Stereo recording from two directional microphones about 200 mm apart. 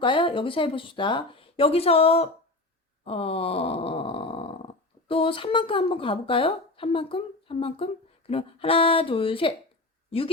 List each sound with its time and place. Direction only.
0.0 s speech: 25° left (ahead or behind)
3.0 s groan: 30° left (ahead or behind)
8.3 s speech: 30° left (ahead or behind)